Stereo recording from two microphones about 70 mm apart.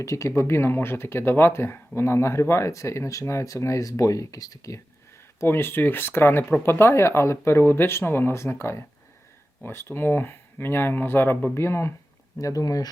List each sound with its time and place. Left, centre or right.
0.0 s speech: left
5.4 s speech: left
12.4 s speech: left